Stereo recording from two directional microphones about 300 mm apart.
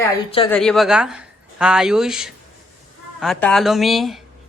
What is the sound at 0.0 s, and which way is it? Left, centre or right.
Speech, centre.